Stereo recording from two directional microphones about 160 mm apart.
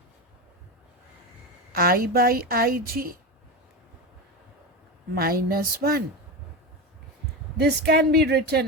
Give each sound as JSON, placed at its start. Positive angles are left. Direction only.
{"t": 1.7, "sound": "a woman's voice", "side_deg": -65}
{"t": 5.1, "sound": "a woman's voice", "side_deg": -65}
{"t": 7.5, "sound": "a woman's voice", "side_deg": -85}